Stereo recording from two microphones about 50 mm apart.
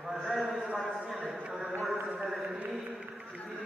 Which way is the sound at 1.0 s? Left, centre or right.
Centre.